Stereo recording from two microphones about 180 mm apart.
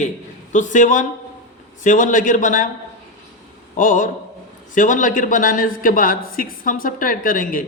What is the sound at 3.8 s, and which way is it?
A man's voice, 45° left (ahead or behind).